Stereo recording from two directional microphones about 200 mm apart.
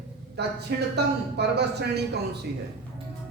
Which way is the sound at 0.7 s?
55° right (ahead or behind).